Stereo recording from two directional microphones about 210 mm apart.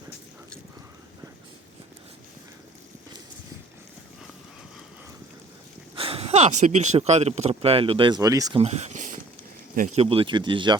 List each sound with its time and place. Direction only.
6.0 s speech: 25° right (ahead or behind)
8.6 s a sound: 35° right (ahead or behind)
9.7 s speech: 35° right (ahead or behind)